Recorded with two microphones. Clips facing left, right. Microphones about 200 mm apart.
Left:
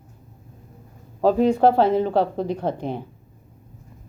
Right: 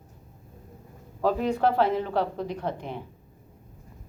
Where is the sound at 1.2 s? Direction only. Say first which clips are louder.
Left 7 dB; 30° left (ahead or behind).